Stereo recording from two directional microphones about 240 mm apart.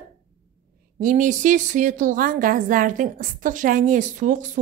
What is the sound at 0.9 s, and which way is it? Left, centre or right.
A woman's voice, right.